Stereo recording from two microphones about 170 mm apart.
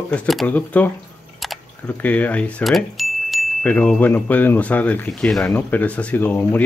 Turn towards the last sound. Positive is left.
turn(degrees=10)  # may be behind; listen again after turning